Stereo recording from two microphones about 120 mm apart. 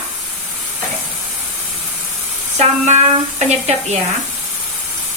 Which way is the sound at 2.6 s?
75° right (ahead or behind).